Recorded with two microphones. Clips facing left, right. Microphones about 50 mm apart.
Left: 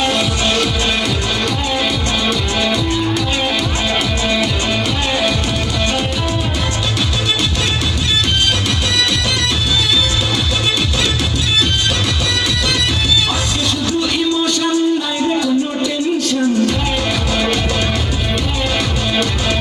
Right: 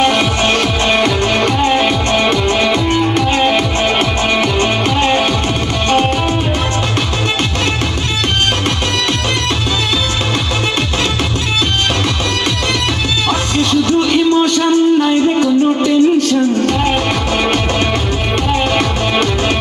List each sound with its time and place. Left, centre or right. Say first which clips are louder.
2.9 s music: right 4 dB; right
14.0 s music: right 5 dB; right